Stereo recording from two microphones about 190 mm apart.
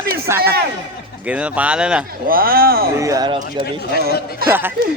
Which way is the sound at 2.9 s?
15° right (ahead or behind).